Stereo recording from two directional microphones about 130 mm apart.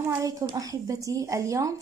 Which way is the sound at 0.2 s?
25° right (ahead or behind).